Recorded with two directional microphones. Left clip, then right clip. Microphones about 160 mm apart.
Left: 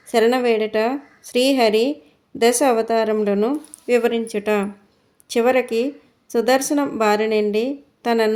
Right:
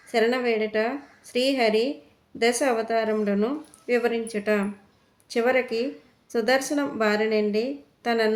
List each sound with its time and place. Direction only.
0.1 s speech: 40° left (ahead or behind)